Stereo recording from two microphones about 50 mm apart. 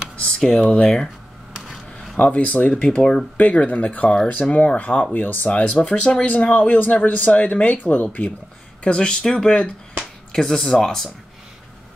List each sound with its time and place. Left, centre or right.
0.4 s speech: centre
1.6 s a sound: centre
2.2 s speech: left
3.0 s speech: centre
3.3 s speech: left
5.5 s speech: left
8.8 s speech: centre